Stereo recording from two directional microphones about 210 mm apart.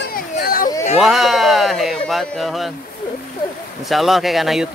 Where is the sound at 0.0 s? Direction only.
45° left (ahead or behind).